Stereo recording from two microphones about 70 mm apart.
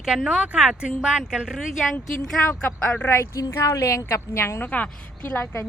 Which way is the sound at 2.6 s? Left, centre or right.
Left.